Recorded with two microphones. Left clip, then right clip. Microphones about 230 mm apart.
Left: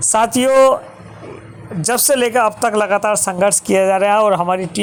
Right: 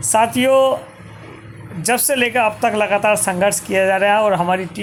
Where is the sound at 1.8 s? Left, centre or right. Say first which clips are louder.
Left 2 dB; left.